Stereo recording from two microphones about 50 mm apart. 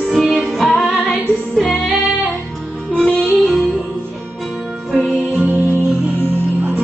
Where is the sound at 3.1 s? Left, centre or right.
Right.